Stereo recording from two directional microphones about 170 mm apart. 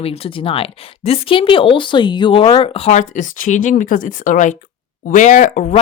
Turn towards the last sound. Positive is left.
turn(degrees=45)  # may be behind; listen again after turning